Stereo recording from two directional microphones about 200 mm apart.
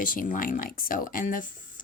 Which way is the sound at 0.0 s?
45° left (ahead or behind).